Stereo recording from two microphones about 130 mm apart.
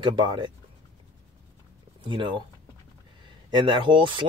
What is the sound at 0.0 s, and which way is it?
Speech, 35° right (ahead or behind).